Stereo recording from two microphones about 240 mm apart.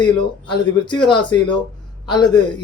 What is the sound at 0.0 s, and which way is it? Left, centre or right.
Speech, centre.